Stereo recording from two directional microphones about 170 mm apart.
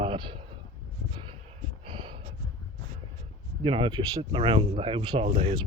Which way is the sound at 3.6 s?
30° right (ahead or behind).